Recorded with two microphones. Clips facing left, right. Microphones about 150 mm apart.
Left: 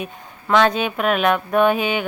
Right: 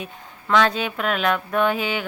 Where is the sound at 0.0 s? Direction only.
20° left (ahead or behind).